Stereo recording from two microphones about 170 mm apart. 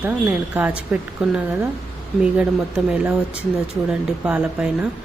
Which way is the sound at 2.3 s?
5° right (ahead or behind).